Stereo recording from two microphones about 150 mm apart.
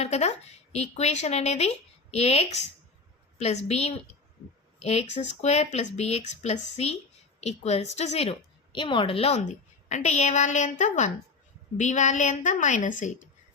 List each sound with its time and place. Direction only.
0.0 s a woman's voice: 50° left (ahead or behind)